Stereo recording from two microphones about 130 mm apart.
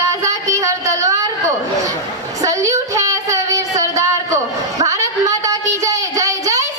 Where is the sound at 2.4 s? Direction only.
25° right (ahead or behind).